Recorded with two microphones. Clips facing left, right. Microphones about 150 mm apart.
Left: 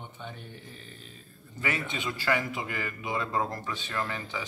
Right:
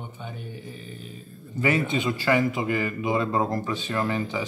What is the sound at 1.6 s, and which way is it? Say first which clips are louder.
A man's voice: right 9 dB; 20° right (ahead or behind).